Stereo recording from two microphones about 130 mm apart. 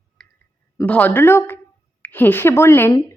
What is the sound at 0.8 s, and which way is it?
Speech, 15° left (ahead or behind).